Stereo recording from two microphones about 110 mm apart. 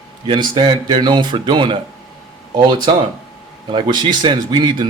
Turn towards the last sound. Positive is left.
turn(degrees=-45)  # may be behind; listen again after turning